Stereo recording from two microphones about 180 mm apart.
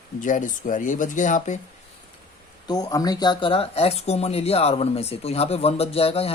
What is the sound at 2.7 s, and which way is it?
Speech, 20° left (ahead or behind).